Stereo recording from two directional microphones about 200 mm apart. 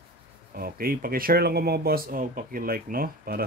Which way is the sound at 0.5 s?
45° right (ahead or behind).